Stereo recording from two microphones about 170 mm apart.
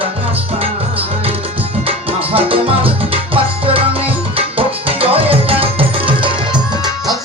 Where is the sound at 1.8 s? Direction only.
35° right (ahead or behind).